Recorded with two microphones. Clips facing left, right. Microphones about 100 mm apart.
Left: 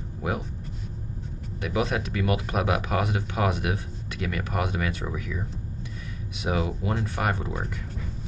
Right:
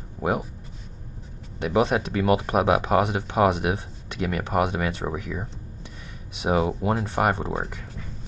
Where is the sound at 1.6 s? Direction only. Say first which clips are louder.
Right 5 dB; 25° right (ahead or behind).